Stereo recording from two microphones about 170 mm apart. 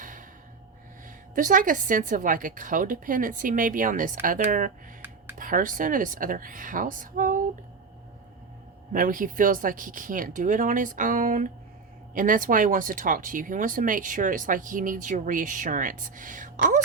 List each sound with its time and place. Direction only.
0.0 s gasp: 50° right (ahead or behind)
1.4 s speech: 50° right (ahead or behind)
8.9 s speech: 55° right (ahead or behind)